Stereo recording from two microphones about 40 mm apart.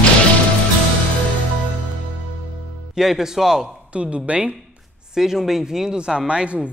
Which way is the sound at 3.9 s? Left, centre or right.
Right.